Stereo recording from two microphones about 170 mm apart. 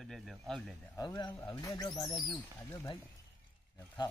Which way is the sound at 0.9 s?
25° left (ahead or behind).